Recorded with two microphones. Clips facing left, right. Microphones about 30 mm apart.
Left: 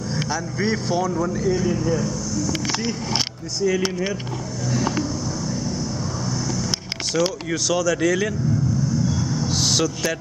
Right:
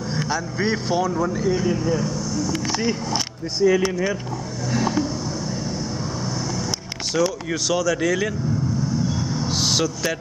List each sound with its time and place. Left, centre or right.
0.3 s speech: centre
4.6 s vehicle: right
7.2 s speech: centre
9.0 s vehicle: right
9.6 s a sound: centre